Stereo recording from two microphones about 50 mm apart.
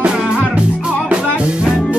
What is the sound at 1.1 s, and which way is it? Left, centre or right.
Music, right.